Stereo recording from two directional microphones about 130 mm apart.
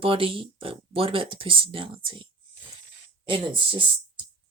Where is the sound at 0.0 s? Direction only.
45° right (ahead or behind).